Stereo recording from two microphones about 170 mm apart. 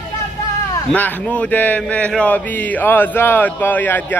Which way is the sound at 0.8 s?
10° left (ahead or behind).